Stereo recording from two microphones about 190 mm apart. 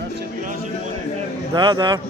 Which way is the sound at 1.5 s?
20° right (ahead or behind).